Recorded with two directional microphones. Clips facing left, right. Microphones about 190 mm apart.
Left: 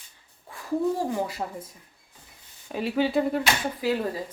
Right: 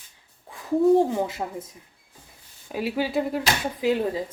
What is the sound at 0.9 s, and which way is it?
Speech, 25° right (ahead or behind).